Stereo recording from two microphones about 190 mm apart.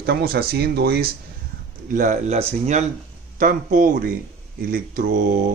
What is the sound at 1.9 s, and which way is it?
Speech, 45° right (ahead or behind).